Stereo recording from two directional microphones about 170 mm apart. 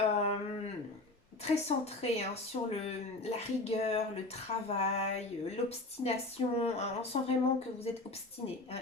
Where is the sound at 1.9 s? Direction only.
35° left (ahead or behind).